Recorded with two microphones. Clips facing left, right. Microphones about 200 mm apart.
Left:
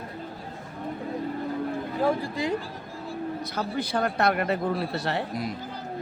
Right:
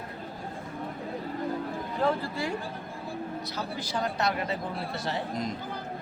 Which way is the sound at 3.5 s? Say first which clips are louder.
Left 7 dB; 60° left (ahead or behind).